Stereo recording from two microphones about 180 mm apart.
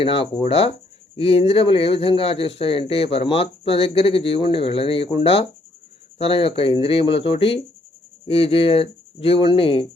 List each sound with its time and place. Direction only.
0.0 s speech: 30° left (ahead or behind)